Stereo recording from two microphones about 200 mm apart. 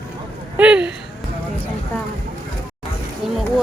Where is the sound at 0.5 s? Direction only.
5° right (ahead or behind).